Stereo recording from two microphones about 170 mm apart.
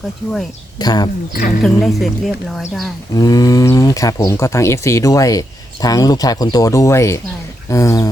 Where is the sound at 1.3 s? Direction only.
60° left (ahead or behind).